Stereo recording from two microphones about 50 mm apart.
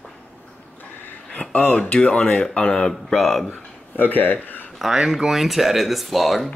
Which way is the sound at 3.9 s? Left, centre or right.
Left.